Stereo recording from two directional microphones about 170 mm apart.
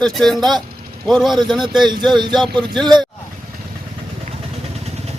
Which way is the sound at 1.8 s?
25° right (ahead or behind).